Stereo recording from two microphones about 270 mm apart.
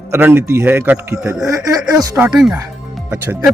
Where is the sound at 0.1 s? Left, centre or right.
Centre.